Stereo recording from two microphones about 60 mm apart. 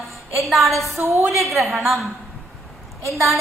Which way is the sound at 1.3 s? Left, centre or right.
Centre.